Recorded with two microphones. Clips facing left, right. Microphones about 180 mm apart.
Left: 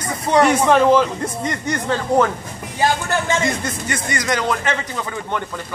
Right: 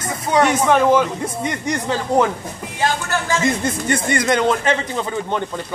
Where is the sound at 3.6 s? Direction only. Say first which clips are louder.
Right 5 dB; 30° right (ahead or behind).